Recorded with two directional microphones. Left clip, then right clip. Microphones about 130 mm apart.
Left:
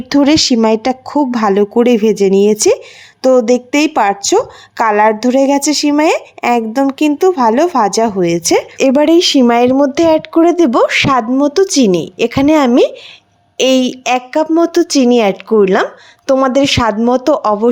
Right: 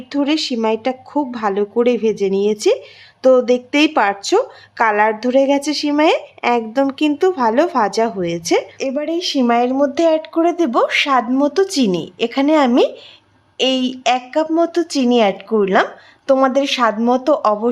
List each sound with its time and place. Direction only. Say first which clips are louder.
0.1 s speech: left 8 dB; 55° left (ahead or behind)
3.2 s speech: left 3 dB; 30° left (ahead or behind)
8.9 s speech: left 13 dB; 90° left
9.5 s speech: left 5 dB; 60° left (ahead or behind)
9.8 s speech: left 4 dB; 45° left (ahead or behind)
11.3 s speech: left 5 dB; 35° left (ahead or behind)